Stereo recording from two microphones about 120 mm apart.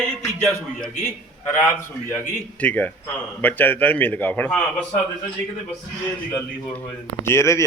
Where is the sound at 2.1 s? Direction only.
15° left (ahead or behind).